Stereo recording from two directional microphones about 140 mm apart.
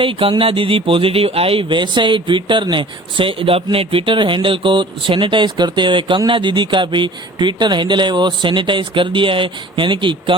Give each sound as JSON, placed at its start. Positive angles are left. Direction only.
{"t": 0.0, "sound": "speech", "side_deg": -40}